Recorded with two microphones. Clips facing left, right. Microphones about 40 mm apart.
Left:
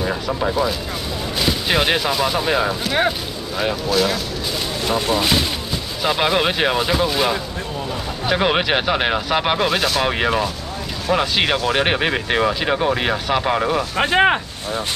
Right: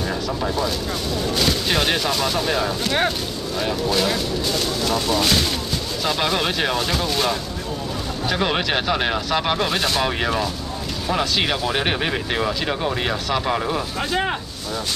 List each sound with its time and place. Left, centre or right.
0.0 s speech: centre
3.9 s speech: centre
4.8 s speech: left
9.7 s speech: centre
10.0 s speech: centre
11.5 s speech: centre
11.8 s speech: centre
13.9 s speech: left